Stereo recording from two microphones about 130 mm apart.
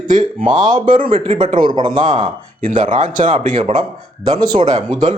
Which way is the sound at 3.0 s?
85° right.